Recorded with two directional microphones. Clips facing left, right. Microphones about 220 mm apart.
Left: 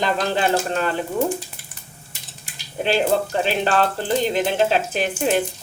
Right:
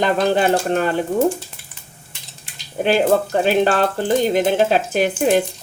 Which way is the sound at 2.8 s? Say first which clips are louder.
Right 4 dB; 50° right (ahead or behind).